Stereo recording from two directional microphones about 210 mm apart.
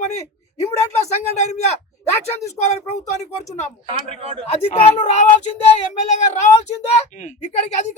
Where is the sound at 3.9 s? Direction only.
30° right (ahead or behind).